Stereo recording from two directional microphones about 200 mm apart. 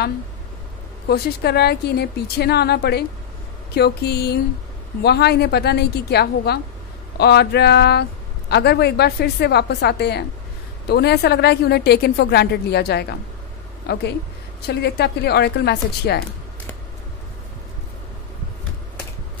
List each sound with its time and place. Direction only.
1.0 s a woman's voice: 55° left (ahead or behind)
14.7 s speech: 55° left (ahead or behind)